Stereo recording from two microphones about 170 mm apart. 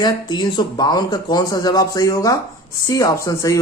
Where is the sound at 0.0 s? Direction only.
25° left (ahead or behind).